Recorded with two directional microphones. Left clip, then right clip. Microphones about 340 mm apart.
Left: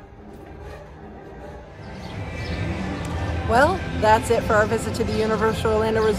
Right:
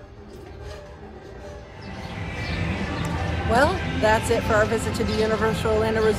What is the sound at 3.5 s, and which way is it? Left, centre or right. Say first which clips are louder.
Speech: left 2 dB; centre.